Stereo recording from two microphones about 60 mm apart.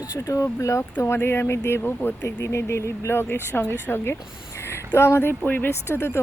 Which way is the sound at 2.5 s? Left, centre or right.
Left.